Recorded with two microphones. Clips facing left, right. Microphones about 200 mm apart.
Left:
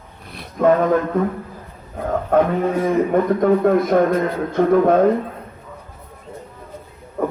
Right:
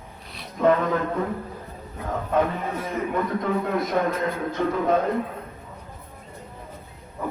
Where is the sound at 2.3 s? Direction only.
55° left (ahead or behind).